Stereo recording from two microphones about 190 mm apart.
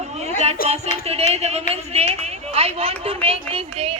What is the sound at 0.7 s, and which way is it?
Speech, 30° right (ahead or behind).